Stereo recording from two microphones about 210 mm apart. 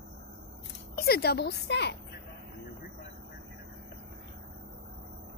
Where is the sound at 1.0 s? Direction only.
50° left (ahead or behind).